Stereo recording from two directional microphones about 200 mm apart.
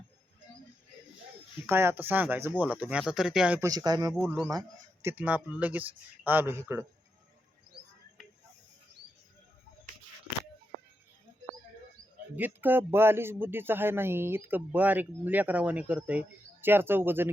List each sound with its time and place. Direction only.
1.6 s speech: 10° right (ahead or behind)
3.7 s speech: 20° right (ahead or behind)
5.0 s speech: 10° right (ahead or behind)
8.2 s a sound: centre (ahead or behind)
12.4 s speech: 10° right (ahead or behind)